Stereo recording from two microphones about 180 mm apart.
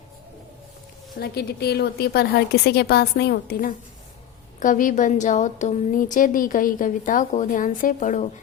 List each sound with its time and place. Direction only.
1.2 s a woman's voice: 60° left (ahead or behind); by 8.3 s 40° left (ahead or behind)